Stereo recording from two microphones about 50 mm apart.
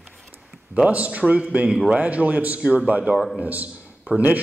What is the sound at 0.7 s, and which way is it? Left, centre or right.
A man's voice, right.